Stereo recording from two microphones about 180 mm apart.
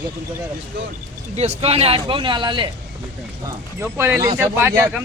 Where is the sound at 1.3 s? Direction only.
35° right (ahead or behind).